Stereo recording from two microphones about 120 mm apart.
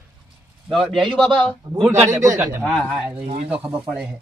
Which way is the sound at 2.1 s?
25° right (ahead or behind).